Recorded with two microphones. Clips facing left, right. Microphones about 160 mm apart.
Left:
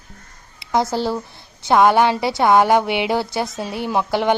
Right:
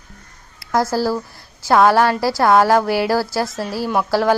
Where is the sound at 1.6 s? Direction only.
Centre (ahead or behind).